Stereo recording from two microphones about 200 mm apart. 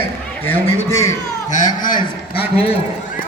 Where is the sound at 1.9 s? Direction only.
25° left (ahead or behind).